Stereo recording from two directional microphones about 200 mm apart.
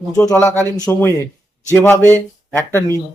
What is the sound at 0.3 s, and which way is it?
Speech, 15° left (ahead or behind).